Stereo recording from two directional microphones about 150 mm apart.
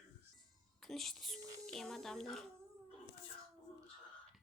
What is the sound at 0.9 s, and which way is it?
Speech, centre (ahead or behind).